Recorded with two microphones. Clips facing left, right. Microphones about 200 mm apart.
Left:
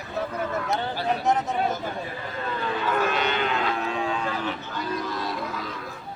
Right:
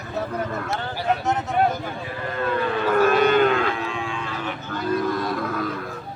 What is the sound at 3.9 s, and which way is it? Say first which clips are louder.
Cattle: left 2 dB; 40° left (ahead or behind).